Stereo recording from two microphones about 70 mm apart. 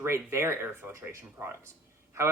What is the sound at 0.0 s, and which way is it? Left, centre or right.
Speech, right.